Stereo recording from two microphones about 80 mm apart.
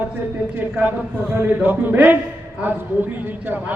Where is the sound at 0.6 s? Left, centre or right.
Right.